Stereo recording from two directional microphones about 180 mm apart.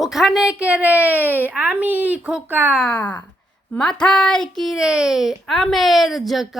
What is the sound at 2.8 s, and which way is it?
A child's voice, 5° left (ahead or behind).